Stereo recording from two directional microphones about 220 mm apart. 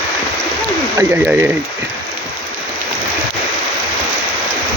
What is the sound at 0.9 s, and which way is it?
Speech, 10° right (ahead or behind).